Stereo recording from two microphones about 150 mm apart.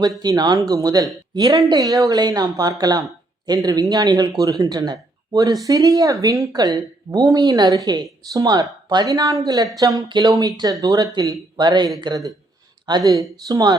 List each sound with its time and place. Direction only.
0.2 s speech: 25° right (ahead or behind)